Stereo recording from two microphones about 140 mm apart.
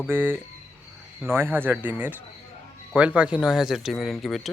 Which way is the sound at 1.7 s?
15° right (ahead or behind).